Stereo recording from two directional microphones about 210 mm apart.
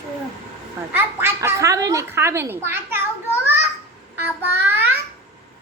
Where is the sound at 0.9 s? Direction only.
10° right (ahead or behind).